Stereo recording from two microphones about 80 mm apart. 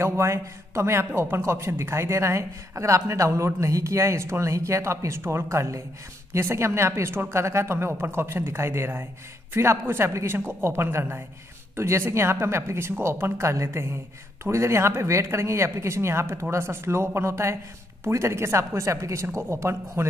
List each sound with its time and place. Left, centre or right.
0.0 s a man's voice: right